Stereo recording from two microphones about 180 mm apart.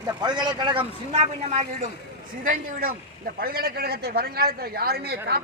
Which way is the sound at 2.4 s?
55° right (ahead or behind).